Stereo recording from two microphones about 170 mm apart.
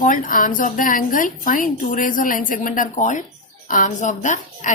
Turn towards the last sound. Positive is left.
turn(degrees=45)  # may be behind; listen again after turning